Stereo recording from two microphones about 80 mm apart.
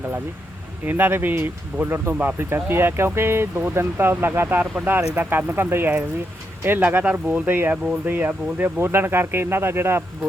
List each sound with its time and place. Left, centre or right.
0.9 s speech: right